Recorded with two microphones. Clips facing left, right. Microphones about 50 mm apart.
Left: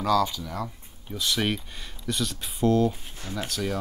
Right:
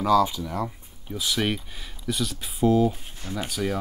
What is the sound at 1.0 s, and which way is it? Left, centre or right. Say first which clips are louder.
Speech: right 1 dB; centre.